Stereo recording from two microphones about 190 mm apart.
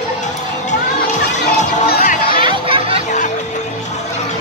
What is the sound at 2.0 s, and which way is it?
Music, 45° left (ahead or behind).